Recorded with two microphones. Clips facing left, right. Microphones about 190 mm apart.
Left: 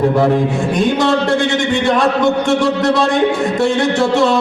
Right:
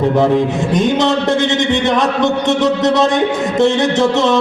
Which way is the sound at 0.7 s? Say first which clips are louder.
Even; 20° right (ahead or behind).